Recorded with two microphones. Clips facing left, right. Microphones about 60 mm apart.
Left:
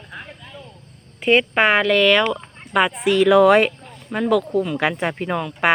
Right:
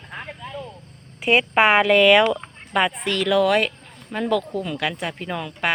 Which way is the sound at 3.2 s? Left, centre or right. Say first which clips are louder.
Left 6 dB; left.